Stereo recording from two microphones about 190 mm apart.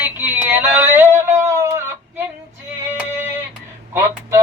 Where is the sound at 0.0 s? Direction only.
10° right (ahead or behind).